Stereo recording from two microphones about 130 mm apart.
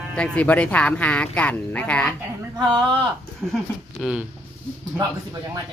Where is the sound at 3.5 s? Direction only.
Centre (ahead or behind).